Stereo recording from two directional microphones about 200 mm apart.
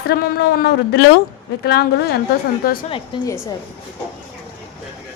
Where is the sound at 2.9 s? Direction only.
15° left (ahead or behind).